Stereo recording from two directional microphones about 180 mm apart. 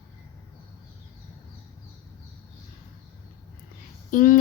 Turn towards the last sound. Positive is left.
turn(degrees=50)  # may be behind; listen again after turning